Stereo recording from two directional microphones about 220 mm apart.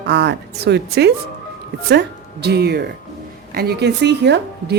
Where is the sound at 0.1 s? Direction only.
50° right (ahead or behind).